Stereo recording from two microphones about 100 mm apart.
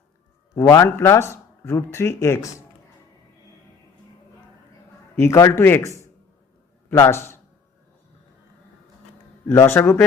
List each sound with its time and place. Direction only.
0.5 s speech: 30° left (ahead or behind)
5.1 s speech: 30° left (ahead or behind)
9.6 s speech: 25° left (ahead or behind)